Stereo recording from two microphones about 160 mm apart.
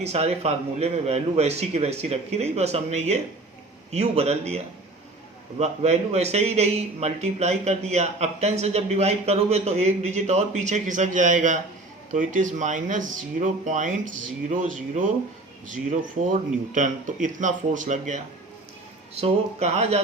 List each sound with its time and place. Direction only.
0.0 s a man's voice: 40° right (ahead or behind)
19.2 s a man's voice: 40° right (ahead or behind)